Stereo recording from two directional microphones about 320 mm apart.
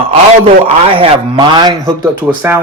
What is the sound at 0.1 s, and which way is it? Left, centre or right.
A man's voice, centre.